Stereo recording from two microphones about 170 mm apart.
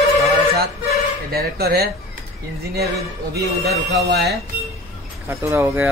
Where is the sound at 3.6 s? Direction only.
70° right (ahead or behind).